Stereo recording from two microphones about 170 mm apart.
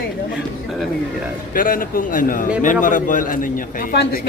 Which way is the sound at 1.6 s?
55° left (ahead or behind).